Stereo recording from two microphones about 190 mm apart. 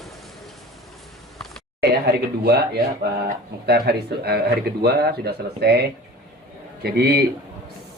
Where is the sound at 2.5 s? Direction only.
55° right (ahead or behind).